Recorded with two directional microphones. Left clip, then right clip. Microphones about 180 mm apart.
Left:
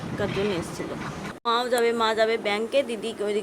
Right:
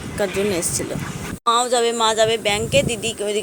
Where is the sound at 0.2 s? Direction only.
30° right (ahead or behind).